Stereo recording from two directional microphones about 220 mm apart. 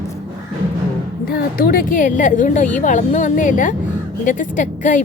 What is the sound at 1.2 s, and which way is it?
Speech, 40° left (ahead or behind).